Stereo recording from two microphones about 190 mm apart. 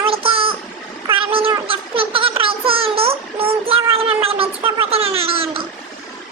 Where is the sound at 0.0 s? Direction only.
30° right (ahead or behind).